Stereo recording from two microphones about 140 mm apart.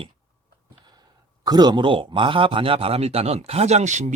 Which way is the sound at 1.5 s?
30° right (ahead or behind).